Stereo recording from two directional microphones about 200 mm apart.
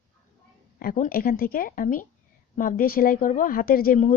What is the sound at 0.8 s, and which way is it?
Speech, 45° left (ahead or behind).